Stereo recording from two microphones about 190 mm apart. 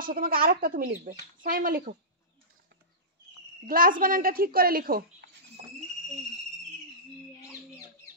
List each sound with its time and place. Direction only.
0.0 s speech: 50° right (ahead or behind)
3.6 s speech: 50° right (ahead or behind)